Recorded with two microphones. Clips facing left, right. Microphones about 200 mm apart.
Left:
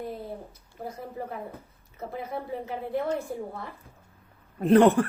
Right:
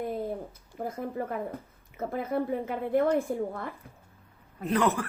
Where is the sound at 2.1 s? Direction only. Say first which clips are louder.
Right 5 dB; 50° right (ahead or behind).